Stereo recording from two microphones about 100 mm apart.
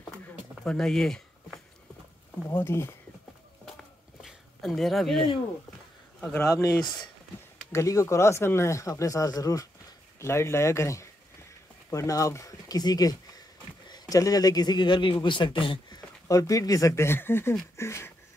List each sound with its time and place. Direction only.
0.7 s speech: 5° left (ahead or behind)
2.5 s speech: 25° left (ahead or behind)
3.6 s a sound: 5° left (ahead or behind)
6.5 s speech: 35° left (ahead or behind)
6.8 s speech: 5° left (ahead or behind)
7.7 s speech: 30° left (ahead or behind)
10.1 s speech: 25° left (ahead or behind); by 16.0 s 55° left (ahead or behind)
16.3 s speech: 35° left (ahead or behind)
17.7 s a sound: 25° left (ahead or behind)